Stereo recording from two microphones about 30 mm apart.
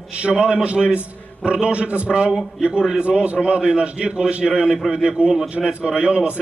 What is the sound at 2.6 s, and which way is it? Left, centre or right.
A man's voice, right.